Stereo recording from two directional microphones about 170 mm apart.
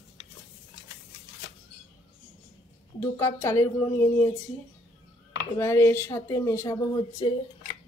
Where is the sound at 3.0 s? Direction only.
15° left (ahead or behind).